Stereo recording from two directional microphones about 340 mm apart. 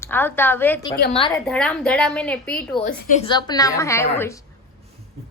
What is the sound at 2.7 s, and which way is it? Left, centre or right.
A woman's voice, left.